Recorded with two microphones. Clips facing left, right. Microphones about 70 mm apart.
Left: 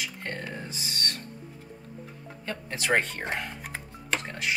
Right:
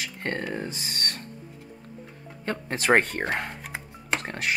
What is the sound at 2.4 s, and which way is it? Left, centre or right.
Speech, right.